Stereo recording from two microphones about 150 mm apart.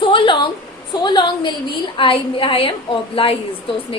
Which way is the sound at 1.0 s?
30° left (ahead or behind).